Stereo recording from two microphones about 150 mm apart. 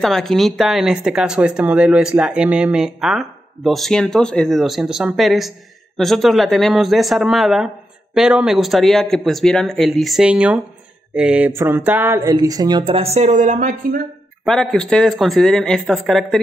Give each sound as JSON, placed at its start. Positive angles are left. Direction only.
{"t": 0.0, "sound": "speech", "side_deg": 0}
{"t": 11.1, "sound": "mantra", "side_deg": -10}
{"t": 12.2, "sound": "speech", "side_deg": -25}
{"t": 14.4, "sound": "speech", "side_deg": 5}